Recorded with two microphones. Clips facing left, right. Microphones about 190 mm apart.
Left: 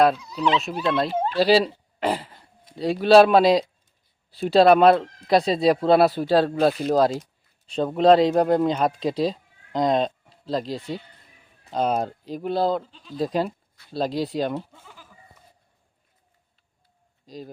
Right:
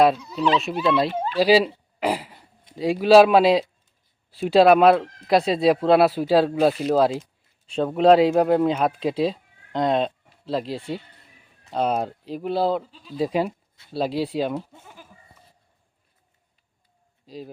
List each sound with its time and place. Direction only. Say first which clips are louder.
0.6 s a man's voice: right 2 dB; 5° right (ahead or behind)
14.7 s bleat: right 3 dB; 20° right (ahead or behind)
17.2 s a man's voice: right 1 dB; 5° right (ahead or behind)